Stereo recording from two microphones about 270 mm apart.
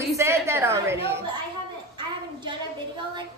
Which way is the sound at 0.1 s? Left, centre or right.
Centre.